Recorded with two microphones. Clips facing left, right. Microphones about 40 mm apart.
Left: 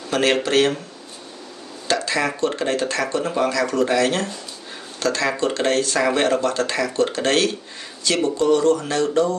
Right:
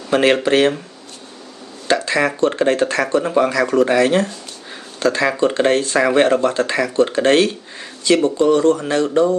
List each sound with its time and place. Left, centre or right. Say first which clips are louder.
0.1 s speech: right 4 dB; right
1.9 s speech: right 4 dB; right